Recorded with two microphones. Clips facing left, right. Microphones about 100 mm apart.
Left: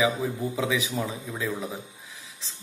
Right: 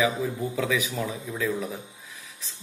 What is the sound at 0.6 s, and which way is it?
Speech, 25° left (ahead or behind).